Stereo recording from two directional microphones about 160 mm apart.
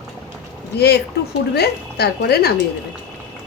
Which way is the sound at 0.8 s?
90° left.